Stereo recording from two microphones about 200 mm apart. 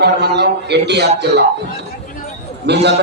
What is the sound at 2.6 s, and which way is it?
Speech, 55° right (ahead or behind).